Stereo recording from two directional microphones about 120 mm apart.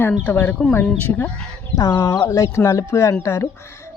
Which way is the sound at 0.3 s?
15° left (ahead or behind).